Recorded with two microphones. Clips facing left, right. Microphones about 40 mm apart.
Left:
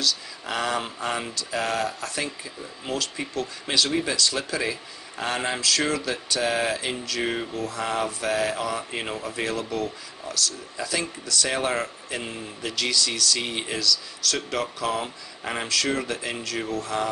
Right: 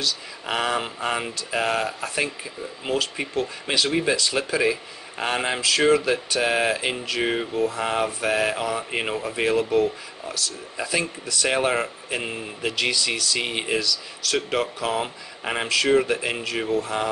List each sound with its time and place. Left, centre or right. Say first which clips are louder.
0.0 s speech: even; right